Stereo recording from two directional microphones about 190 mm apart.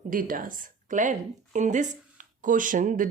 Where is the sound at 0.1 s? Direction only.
45° right (ahead or behind).